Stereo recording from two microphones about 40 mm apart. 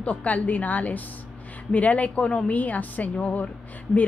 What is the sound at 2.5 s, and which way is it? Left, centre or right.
Speech, left.